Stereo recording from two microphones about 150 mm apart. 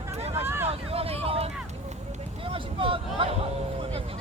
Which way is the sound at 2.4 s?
35° right (ahead or behind).